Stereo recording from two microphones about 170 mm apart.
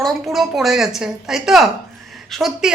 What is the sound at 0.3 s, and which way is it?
Speech, centre (ahead or behind).